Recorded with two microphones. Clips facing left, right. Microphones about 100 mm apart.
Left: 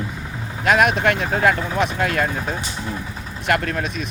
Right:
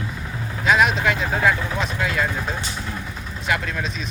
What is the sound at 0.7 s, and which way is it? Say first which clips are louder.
Speech: left 2 dB; 55° left (ahead or behind).